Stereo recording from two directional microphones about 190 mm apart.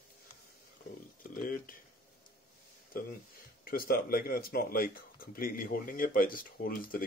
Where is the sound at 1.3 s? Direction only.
45° left (ahead or behind).